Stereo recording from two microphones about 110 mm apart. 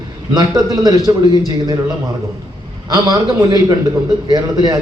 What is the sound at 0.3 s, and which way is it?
Speech, 35° right (ahead or behind).